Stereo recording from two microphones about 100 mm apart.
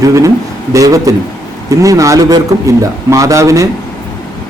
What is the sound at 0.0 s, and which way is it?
Speech, 35° right (ahead or behind).